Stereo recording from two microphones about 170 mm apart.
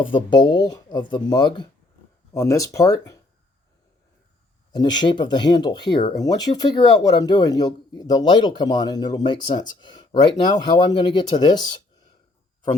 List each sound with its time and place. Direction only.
0.0 s speech: 30° left (ahead or behind)
4.7 s speech: 25° left (ahead or behind)